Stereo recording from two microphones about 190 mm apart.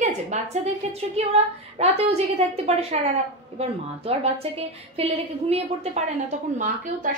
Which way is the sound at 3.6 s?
30° right (ahead or behind).